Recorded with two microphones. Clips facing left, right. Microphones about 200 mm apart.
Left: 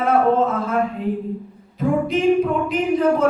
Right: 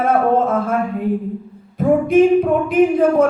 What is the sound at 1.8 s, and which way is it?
Music, 50° right (ahead or behind).